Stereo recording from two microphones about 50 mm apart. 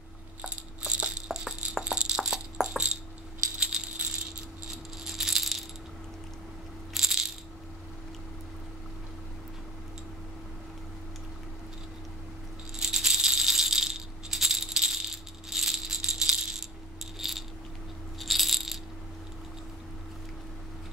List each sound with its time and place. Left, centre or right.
0.4 s rattle: centre
3.5 s coin: centre
5.0 s rattle: centre
6.9 s rattle: centre
12.7 s rattle: centre
17.2 s a sound: centre
18.2 s rattle: centre